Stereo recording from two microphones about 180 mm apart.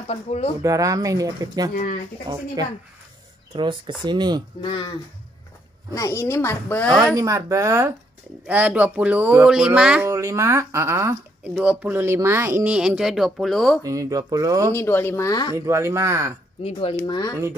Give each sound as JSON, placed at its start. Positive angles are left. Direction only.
{"t": 0.0, "sound": "speech", "side_deg": 35}
{"t": 0.6, "sound": "speech", "side_deg": -20}
{"t": 1.7, "sound": "speech", "side_deg": 45}
{"t": 2.6, "sound": "speech", "side_deg": -20}
{"t": 4.6, "sound": "speech", "side_deg": 25}
{"t": 5.9, "sound": "a woman's voice", "side_deg": 15}
{"t": 7.2, "sound": "speech", "side_deg": -15}
{"t": 13.8, "sound": "speech", "side_deg": -20}
{"t": 14.7, "sound": "a woman's voice", "side_deg": 15}
{"t": 15.5, "sound": "speech", "side_deg": -15}
{"t": 16.9, "sound": "speech", "side_deg": 20}